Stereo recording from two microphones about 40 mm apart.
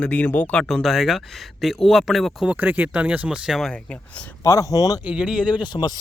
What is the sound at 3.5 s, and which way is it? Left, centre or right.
Speech, centre.